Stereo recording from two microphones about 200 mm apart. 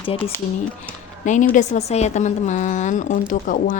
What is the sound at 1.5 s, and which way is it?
Speech, 35° left (ahead or behind).